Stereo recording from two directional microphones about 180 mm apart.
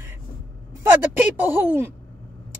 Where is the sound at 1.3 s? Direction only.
10° right (ahead or behind).